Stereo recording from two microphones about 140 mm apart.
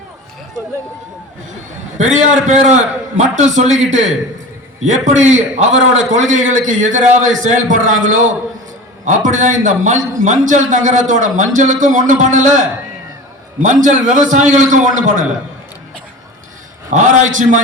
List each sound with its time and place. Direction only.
2.0 s a man's voice: 60° right (ahead or behind)
13.8 s a man's voice: 65° right (ahead or behind)
16.9 s a man's voice: 60° right (ahead or behind)